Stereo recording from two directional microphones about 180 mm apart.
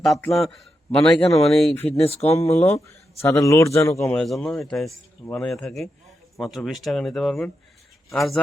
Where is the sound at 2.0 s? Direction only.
35° left (ahead or behind).